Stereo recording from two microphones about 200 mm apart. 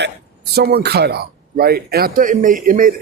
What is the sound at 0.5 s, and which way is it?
A man's voice, 55° right (ahead or behind).